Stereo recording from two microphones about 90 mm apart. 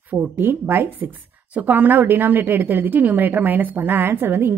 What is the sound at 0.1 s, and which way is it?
A woman's voice, 20° right (ahead or behind).